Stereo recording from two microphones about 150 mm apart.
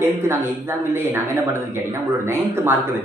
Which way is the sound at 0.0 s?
15° right (ahead or behind).